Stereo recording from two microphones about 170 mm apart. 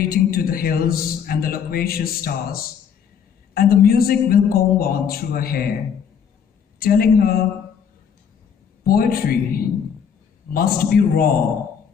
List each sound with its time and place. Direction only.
0.0 s a man's voice: 60° left (ahead or behind)
6.8 s a man's voice: 60° left (ahead or behind)
8.8 s a man's voice: 60° left (ahead or behind)